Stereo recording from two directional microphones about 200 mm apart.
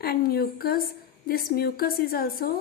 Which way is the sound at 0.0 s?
50° left (ahead or behind).